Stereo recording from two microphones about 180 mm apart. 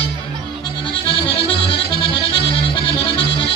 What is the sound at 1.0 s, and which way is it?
Accordion, 30° left (ahead or behind).